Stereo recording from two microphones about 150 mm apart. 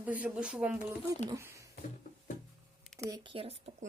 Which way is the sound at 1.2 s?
20° right (ahead or behind).